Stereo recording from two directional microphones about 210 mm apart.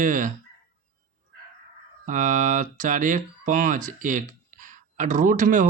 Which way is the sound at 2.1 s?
40° right (ahead or behind).